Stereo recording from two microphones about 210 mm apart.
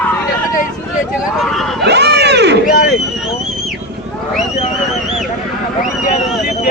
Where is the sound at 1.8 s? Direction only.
55° right (ahead or behind).